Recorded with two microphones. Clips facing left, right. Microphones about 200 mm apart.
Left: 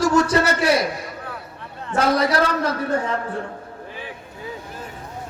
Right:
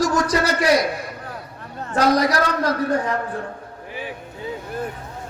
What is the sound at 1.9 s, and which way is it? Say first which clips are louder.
A man's voice: right 1 dB; 25° left (ahead or behind).